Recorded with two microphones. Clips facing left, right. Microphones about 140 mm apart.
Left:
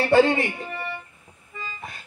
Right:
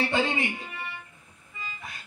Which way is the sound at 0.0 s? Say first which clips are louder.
Left 9 dB; 70° left (ahead or behind).